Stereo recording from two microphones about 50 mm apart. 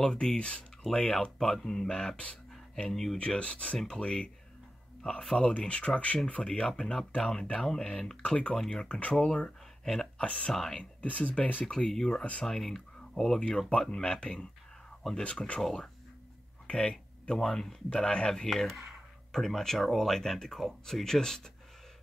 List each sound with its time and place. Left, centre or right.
0.0 s speech: centre
2.9 s speech: centre
3.2 s speech: left
5.3 s speech: centre
8.8 s speech: left
9.1 s speech: centre
10.1 s speech: left
10.5 s speech: centre
10.8 s speech: left
11.9 s speech: centre
16.6 s a sound: centre
17.4 s speech: centre
17.8 s speech: left